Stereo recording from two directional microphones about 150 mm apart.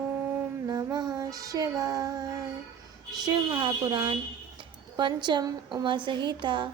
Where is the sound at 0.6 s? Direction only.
25° right (ahead or behind).